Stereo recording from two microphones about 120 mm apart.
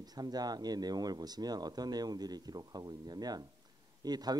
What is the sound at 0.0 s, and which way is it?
Speech, 35° right (ahead or behind).